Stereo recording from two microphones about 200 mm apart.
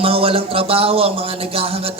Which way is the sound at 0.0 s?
30° right (ahead or behind).